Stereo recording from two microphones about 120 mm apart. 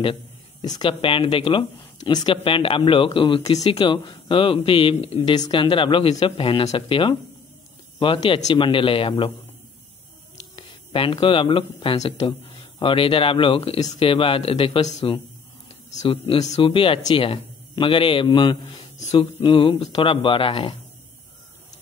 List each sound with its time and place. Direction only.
0.0 s a sound: 45° left (ahead or behind)
0.7 s speech: 35° left (ahead or behind)
1.0 s speech: 45° left (ahead or behind)
5.3 s speech: 40° left (ahead or behind); by 6.8 s 55° left (ahead or behind)
6.9 s speech: 45° left (ahead or behind)
10.9 s speech: 45° left (ahead or behind)
16.1 s speech: 50° left (ahead or behind)